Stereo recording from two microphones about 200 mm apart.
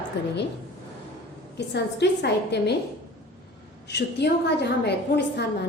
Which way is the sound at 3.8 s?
55° left (ahead or behind).